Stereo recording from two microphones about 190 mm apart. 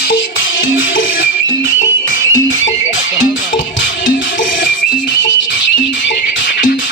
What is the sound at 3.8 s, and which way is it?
Music, 45° left (ahead or behind).